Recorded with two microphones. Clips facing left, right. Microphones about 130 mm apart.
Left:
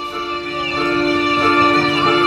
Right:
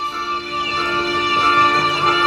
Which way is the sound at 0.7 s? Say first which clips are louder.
Left 6 dB; 45° left (ahead or behind).